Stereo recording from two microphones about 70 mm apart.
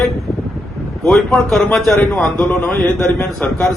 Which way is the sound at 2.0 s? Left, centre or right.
Centre.